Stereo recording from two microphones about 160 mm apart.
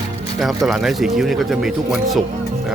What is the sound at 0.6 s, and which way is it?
Speech, centre (ahead or behind).